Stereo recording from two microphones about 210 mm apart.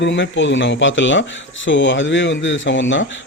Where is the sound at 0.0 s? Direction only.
60° left (ahead or behind).